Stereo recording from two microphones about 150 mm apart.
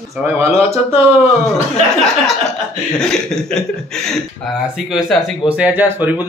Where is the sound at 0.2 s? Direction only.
15° right (ahead or behind).